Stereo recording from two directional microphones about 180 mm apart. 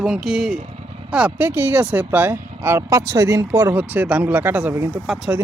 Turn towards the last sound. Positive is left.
turn(degrees=0)  # may be behind; listen again after turning